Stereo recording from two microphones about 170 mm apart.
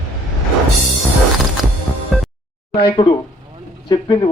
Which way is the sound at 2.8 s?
30° left (ahead or behind).